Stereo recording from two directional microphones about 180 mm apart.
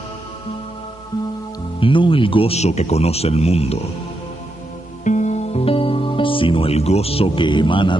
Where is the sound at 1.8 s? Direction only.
30° left (ahead or behind).